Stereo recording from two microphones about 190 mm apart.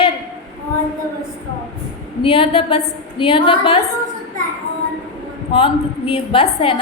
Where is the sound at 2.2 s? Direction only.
25° left (ahead or behind).